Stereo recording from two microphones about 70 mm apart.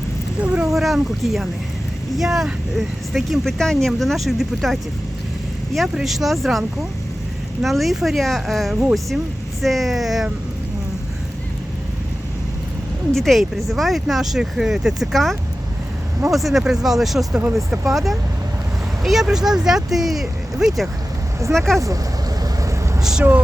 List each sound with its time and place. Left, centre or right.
0.3 s cat: centre
0.7 s speech: centre
8.7 s speech: centre
9.0 s speech: centre
13.1 s speech: centre